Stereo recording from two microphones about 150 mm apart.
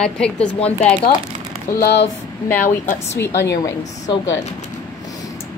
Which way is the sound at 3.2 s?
20° left (ahead or behind).